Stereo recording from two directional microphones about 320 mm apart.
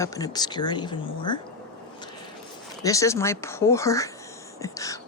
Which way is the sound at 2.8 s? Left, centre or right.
Centre.